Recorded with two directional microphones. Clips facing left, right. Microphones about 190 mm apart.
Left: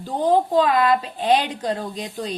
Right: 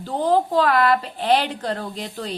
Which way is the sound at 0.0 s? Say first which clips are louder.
Left 1 dB; 15° left (ahead or behind).